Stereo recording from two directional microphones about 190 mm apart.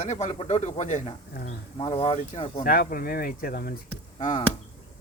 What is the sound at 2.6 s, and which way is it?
Speech, 50° left (ahead or behind).